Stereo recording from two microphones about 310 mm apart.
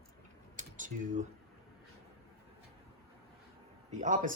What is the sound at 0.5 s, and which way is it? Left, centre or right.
Typing, right.